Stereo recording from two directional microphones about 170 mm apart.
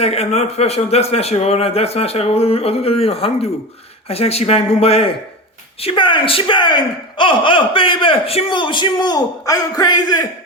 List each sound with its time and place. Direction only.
0.0 s speech: 40° left (ahead or behind); by 10.2 s 25° left (ahead or behind)